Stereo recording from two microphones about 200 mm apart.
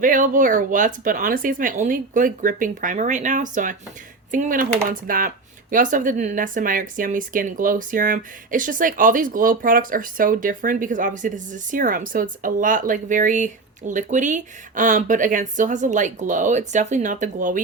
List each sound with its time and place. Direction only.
0.0 s speech: 40° right (ahead or behind)